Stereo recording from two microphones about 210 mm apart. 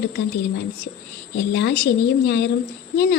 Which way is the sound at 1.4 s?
50° left (ahead or behind).